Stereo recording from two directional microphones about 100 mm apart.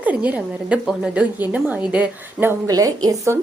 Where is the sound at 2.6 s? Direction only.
35° right (ahead or behind).